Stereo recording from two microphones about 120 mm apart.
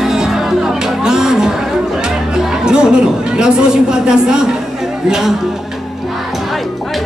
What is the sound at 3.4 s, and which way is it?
Speech, 5° right (ahead or behind).